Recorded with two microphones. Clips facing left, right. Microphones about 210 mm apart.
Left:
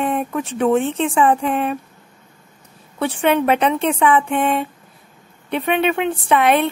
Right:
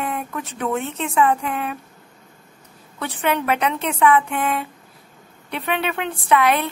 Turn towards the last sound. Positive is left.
turn(degrees=25)  # may be behind; listen again after turning